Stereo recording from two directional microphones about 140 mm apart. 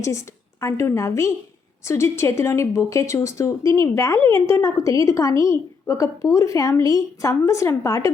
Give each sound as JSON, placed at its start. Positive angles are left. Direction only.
{"t": 0.0, "sound": "speech", "side_deg": 20}